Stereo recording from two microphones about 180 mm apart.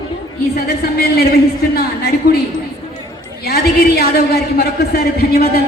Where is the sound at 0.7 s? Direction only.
60° left (ahead or behind).